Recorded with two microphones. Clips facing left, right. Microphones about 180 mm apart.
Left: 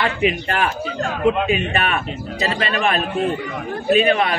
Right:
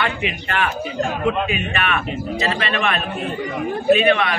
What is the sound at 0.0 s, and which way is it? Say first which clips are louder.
Speech: left 4 dB; 35° left (ahead or behind).